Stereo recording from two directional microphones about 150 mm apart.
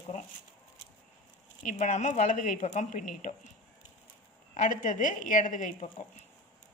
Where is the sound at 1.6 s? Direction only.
55° left (ahead or behind).